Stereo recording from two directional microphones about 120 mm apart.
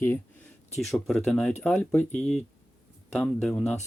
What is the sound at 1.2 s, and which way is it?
Speech, 5° left (ahead or behind).